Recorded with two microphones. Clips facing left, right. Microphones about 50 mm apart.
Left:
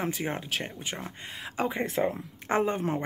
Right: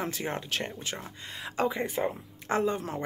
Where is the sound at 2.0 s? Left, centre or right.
Left.